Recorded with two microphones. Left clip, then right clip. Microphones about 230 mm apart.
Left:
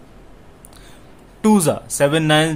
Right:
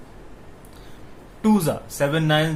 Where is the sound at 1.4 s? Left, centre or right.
Left.